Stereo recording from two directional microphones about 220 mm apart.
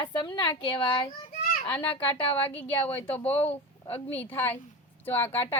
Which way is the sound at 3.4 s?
10° left (ahead or behind).